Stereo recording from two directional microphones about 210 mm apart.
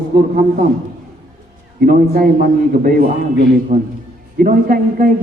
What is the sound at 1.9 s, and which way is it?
A man's voice, 40° right (ahead or behind).